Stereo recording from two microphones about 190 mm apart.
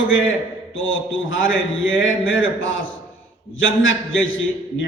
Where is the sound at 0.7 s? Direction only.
90° left.